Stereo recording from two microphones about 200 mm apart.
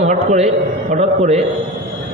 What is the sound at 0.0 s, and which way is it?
A man's voice, 35° right (ahead or behind).